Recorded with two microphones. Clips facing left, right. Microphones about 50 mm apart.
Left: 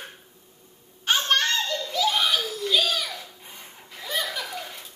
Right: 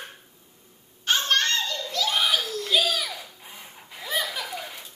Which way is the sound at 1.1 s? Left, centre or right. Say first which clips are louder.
Left 1 dB; centre.